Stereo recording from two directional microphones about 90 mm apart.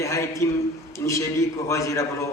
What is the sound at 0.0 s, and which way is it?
A man's voice, 35° left (ahead or behind).